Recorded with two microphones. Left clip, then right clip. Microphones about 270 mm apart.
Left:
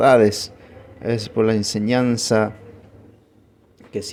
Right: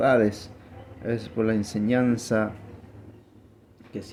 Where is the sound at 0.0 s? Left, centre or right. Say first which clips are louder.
Left 7 dB; left.